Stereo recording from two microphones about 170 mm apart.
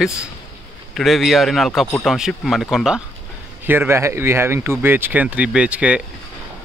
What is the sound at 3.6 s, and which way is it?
A man's voice, 15° right (ahead or behind).